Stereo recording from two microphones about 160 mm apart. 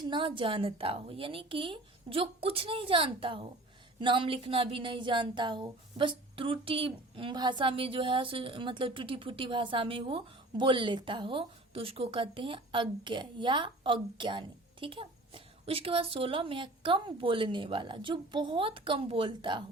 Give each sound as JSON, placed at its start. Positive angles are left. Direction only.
{"t": 0.0, "sound": "speech", "side_deg": -30}